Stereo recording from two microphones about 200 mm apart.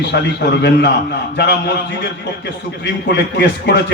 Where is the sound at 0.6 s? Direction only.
55° left (ahead or behind).